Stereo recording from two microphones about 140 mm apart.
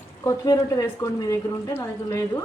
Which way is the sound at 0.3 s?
25° left (ahead or behind).